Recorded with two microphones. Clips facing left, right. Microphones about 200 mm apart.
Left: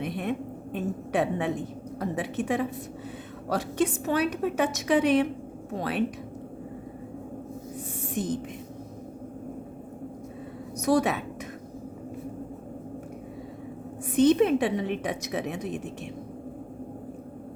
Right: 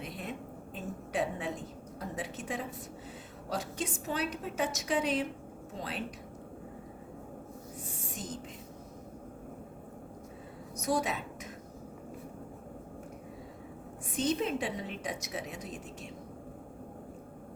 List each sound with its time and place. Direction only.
0.0 s a sound: 65° left (ahead or behind)
2.0 s a woman's voice: 60° left (ahead or behind)
10.8 s a woman's voice: 70° left (ahead or behind)
14.3 s a woman's voice: 65° left (ahead or behind)